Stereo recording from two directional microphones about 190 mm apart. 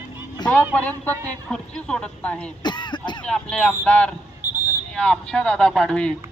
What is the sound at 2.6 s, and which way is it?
Throat clearing, 25° left (ahead or behind).